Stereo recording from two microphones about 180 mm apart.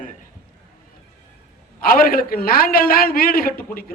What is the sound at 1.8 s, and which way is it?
A man's voice, 55° left (ahead or behind).